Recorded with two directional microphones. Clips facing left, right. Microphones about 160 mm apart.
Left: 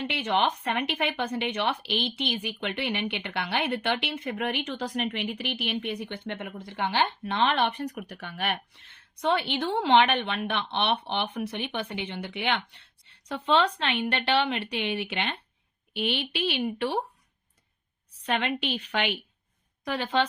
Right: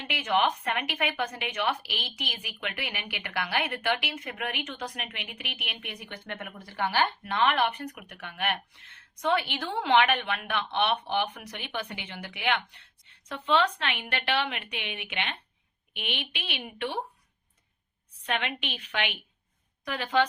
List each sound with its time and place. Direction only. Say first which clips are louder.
0.1 s a woman's voice: right 2 dB; 30° left (ahead or behind)
18.3 s a woman's voice: left 4 dB; 35° left (ahead or behind)